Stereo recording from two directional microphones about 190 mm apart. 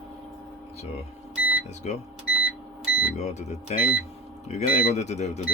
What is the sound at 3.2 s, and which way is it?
Speech, 35° left (ahead or behind).